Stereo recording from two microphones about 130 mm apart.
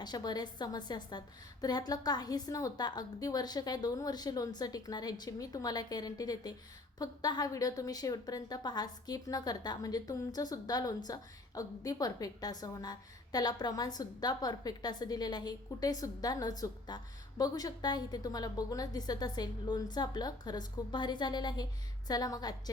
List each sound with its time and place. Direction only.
0.0 s a woman's voice: 30° left (ahead or behind)